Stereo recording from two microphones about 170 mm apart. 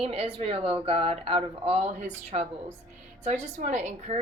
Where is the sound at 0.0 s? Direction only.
35° right (ahead or behind).